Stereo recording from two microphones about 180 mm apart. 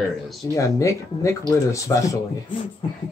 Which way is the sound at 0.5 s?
15° left (ahead or behind).